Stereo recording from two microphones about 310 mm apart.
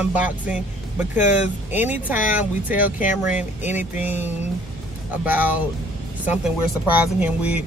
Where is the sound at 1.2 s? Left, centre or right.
Left.